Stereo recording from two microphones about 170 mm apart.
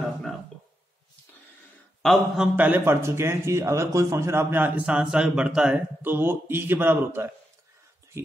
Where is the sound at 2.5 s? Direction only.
10° right (ahead or behind).